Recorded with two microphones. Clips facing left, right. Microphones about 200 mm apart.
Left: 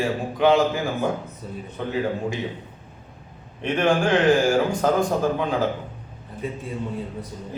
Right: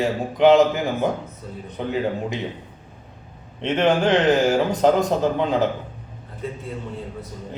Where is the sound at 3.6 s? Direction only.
20° right (ahead or behind).